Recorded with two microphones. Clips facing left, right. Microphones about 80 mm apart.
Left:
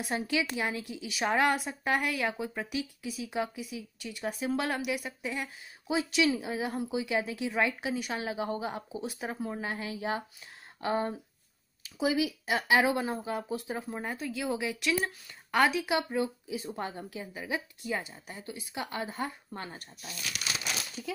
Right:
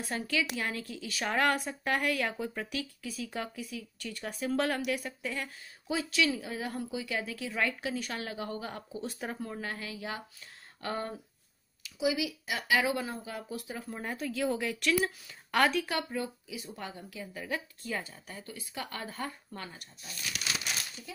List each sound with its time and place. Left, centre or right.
0.0 s a woman's voice: centre
9.5 s speech: centre
11.8 s speech: left
14.0 s a woman's voice: centre; by 17.3 s left
17.3 s a woman's voice: centre